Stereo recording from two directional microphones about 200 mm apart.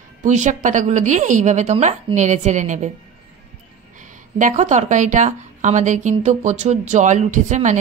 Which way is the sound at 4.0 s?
40° right (ahead or behind).